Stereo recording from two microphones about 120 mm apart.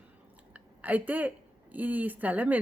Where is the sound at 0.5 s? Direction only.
15° right (ahead or behind).